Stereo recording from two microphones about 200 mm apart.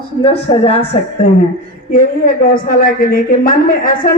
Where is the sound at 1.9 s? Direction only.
45° left (ahead or behind).